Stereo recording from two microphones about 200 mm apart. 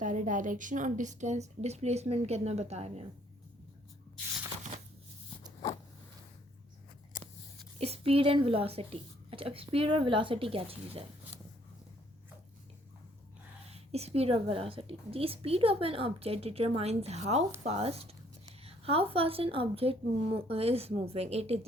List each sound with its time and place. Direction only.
0.0 s a woman's voice: 40° right (ahead or behind)
7.1 s a sound: 40° left (ahead or behind)
7.8 s a woman's voice: 30° right (ahead or behind)
13.7 s a woman's voice: 30° right (ahead or behind)